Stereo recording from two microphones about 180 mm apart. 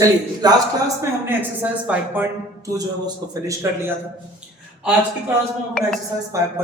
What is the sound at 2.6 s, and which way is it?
A man's voice, 20° right (ahead or behind).